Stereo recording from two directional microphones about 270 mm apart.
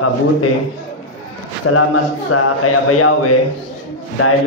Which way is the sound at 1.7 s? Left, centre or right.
Left.